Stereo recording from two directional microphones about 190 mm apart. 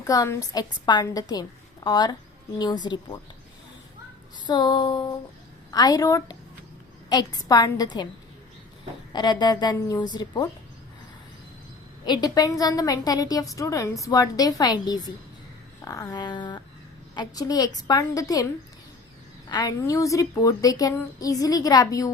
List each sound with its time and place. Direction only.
0.0 s a woman's voice: 15° left (ahead or behind)
4.4 s a woman's voice: 20° left (ahead or behind)
9.1 s a woman's voice: 20° left (ahead or behind)
12.0 s a woman's voice: 20° left (ahead or behind)
19.5 s a woman's voice: 20° left (ahead or behind)